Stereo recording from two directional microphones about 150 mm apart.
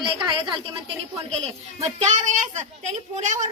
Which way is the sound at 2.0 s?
55° right (ahead or behind).